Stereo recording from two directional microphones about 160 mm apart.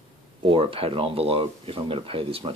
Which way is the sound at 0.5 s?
35° right (ahead or behind).